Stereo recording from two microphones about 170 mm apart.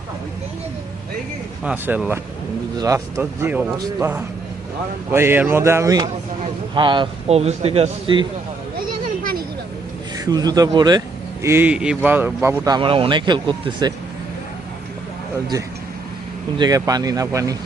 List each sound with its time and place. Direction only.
1.6 s a man's voice: 10° right (ahead or behind)
5.1 s a man's voice: 15° right (ahead or behind); by 8.3 s 30° right (ahead or behind)
10.2 s speech: 20° right (ahead or behind)
11.4 s a man's voice: 10° right (ahead or behind)
12.7 s speech: 30° right (ahead or behind)
16.6 s speech: 20° right (ahead or behind)